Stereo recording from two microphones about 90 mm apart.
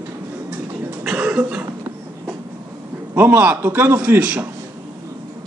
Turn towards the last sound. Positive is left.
turn(degrees=-15)  # may be behind; listen again after turning